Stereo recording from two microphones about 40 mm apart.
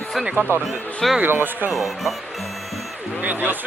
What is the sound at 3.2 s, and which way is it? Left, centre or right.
Speech, right.